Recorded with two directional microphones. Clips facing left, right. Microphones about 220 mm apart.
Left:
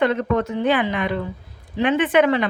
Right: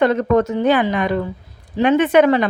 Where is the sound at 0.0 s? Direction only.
45° right (ahead or behind).